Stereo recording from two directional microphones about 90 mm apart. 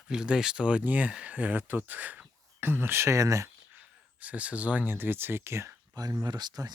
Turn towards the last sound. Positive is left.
turn(degrees=-50)  # may be behind; listen again after turning